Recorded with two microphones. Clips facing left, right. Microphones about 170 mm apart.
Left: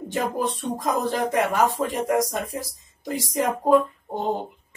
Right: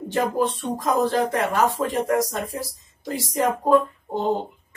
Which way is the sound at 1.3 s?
15° left (ahead or behind).